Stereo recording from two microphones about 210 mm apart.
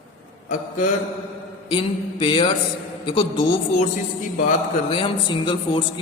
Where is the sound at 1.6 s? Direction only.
25° left (ahead or behind).